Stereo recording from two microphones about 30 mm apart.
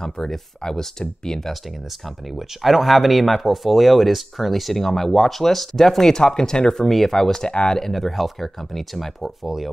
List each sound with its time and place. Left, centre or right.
0.0 s speech: centre
2.0 s speech: centre
6.4 s speech: left
6.7 s speech: centre
7.4 s speech: left
7.7 s speech: centre